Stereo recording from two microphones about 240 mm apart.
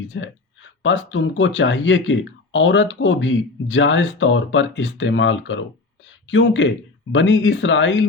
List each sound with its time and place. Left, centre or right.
0.1 s speech: left